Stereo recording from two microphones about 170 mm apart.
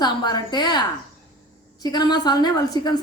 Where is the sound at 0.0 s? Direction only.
25° left (ahead or behind).